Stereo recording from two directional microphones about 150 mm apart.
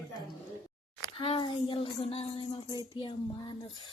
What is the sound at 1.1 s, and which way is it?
Speech, 40° left (ahead or behind).